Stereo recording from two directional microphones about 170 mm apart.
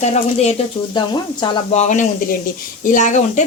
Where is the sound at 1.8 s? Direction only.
45° left (ahead or behind).